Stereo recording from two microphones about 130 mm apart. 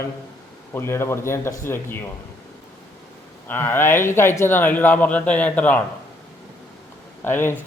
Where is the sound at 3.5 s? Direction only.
15° left (ahead or behind).